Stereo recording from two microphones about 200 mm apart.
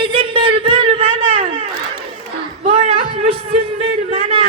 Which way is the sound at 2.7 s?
30° right (ahead or behind).